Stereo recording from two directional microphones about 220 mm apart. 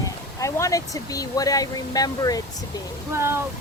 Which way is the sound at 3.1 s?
10° right (ahead or behind).